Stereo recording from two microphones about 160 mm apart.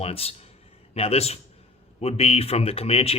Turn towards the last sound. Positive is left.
turn(degrees=40)  # may be behind; listen again after turning